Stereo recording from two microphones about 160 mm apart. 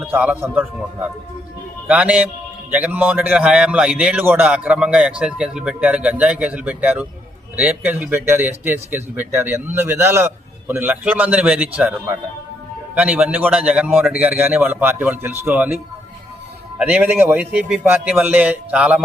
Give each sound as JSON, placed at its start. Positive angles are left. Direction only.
{"t": 0.0, "sound": "speech", "side_deg": -10}
{"t": 1.9, "sound": "speech", "side_deg": -10}